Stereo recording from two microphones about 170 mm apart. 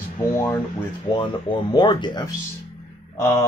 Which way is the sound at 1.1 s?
25° left (ahead or behind).